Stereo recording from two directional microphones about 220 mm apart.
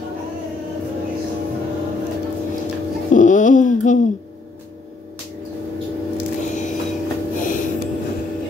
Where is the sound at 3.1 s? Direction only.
35° left (ahead or behind).